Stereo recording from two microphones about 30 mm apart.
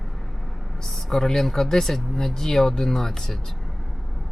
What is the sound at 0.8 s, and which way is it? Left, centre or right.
Speech, centre.